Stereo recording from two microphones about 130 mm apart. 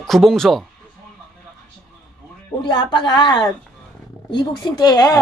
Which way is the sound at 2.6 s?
35° left (ahead or behind).